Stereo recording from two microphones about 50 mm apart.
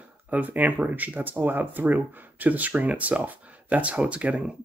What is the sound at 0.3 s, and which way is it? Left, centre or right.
Speech, right.